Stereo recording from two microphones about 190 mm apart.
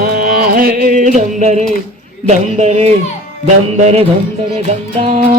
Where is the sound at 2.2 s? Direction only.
35° right (ahead or behind).